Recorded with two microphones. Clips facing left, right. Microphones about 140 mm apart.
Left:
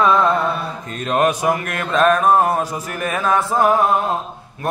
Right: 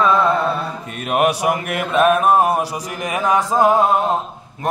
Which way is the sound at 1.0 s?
10° right (ahead or behind).